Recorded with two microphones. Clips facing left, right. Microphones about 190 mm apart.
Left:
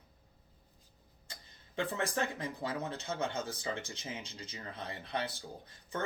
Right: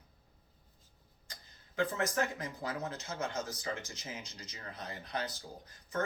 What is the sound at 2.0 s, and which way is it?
Speech, 30° left (ahead or behind).